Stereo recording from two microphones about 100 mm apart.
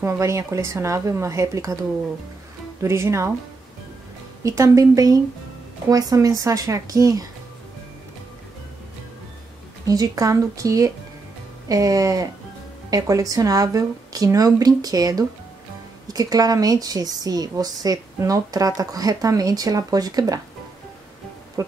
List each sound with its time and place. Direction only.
0.0 s a woman's voice: 30° right (ahead or behind)
4.4 s a woman's voice: 30° right (ahead or behind)
9.8 s a woman's voice: 40° right (ahead or behind)
21.6 s a woman's voice: 35° right (ahead or behind)